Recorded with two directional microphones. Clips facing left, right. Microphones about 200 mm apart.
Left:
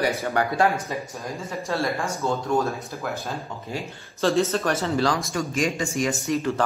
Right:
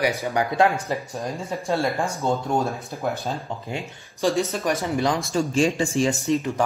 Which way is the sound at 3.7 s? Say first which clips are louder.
Even; 15° right (ahead or behind).